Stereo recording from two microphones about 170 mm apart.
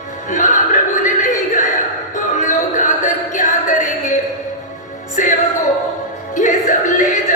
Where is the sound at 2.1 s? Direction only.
50° left (ahead or behind).